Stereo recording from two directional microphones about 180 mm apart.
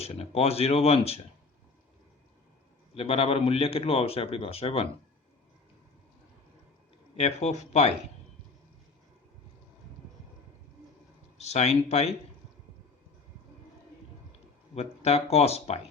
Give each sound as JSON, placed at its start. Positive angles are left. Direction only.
{"t": 0.0, "sound": "a man's voice", "side_deg": 35}
{"t": 2.9, "sound": "a man's voice", "side_deg": 30}
{"t": 7.2, "sound": "a man's voice", "side_deg": 35}
{"t": 11.3, "sound": "a man's voice", "side_deg": 40}
{"t": 14.8, "sound": "a man's voice", "side_deg": 35}